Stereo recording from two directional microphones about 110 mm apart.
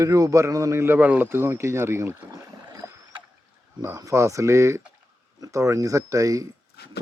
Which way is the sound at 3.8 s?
30° right (ahead or behind).